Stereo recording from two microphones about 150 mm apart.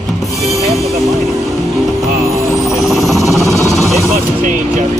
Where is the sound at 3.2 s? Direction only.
20° right (ahead or behind).